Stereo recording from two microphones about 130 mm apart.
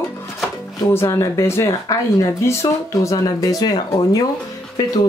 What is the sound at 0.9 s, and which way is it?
Speech, 20° left (ahead or behind).